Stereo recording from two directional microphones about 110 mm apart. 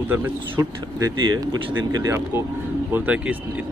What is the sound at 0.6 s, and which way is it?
Speech, 30° right (ahead or behind).